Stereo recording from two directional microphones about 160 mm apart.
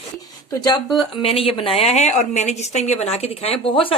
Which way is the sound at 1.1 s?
35° left (ahead or behind).